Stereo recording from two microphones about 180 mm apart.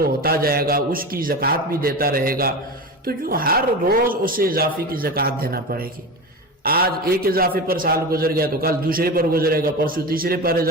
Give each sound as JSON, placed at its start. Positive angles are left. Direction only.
{"t": 0.2, "sound": "a man's voice", "side_deg": -55}